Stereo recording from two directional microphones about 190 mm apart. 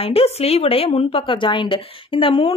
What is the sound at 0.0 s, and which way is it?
A woman's voice, 30° left (ahead or behind).